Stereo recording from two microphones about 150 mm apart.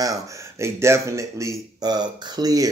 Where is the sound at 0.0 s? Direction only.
20° right (ahead or behind).